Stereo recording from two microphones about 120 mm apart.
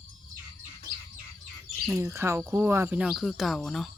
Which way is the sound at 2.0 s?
20° right (ahead or behind).